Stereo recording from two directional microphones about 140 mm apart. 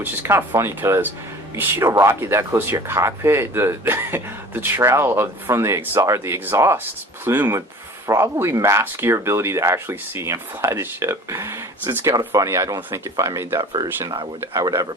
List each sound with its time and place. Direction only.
0.0 s speech: 15° right (ahead or behind)